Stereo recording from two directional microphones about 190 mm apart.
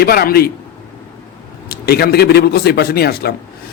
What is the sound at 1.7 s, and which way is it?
Speech, 55° left (ahead or behind).